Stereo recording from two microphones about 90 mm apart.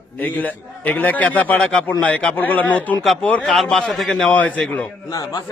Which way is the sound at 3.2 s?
15° left (ahead or behind).